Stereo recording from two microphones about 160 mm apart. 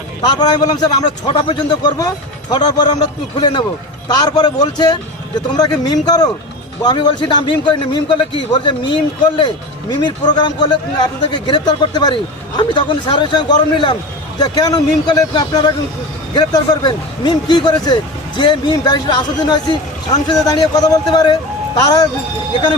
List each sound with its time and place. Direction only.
0.2 s a man's voice: 25° left (ahead or behind)
9.9 s a man's voice: 25° left (ahead or behind)